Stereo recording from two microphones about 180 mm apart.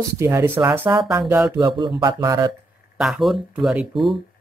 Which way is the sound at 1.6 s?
25° right (ahead or behind).